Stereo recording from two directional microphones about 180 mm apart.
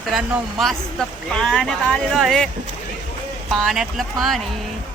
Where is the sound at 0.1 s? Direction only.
Centre (ahead or behind).